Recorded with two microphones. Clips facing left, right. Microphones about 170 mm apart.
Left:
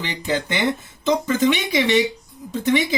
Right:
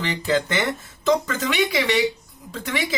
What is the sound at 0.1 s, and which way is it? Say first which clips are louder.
Speech: right 2 dB; 15° left (ahead or behind).